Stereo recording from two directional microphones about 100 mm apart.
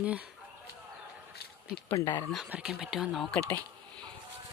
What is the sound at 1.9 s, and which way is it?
Speech, 40° left (ahead or behind).